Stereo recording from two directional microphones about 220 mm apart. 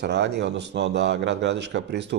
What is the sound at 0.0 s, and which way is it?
A man's voice, 50° right (ahead or behind).